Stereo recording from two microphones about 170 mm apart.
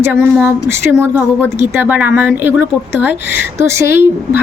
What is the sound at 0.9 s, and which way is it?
A woman's voice, 15° right (ahead or behind).